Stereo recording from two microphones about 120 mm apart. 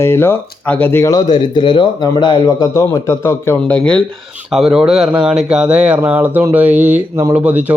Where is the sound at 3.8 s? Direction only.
10° left (ahead or behind).